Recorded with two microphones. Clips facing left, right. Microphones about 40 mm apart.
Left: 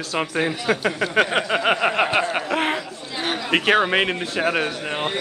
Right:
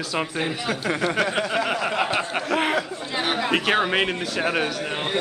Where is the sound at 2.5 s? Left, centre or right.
Centre.